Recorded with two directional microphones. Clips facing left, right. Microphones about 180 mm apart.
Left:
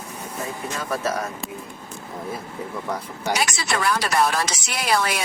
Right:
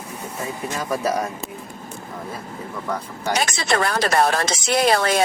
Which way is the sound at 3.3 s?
50° right (ahead or behind).